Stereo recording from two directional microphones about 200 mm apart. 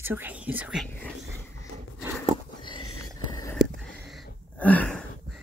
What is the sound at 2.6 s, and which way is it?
Sniff, 25° left (ahead or behind).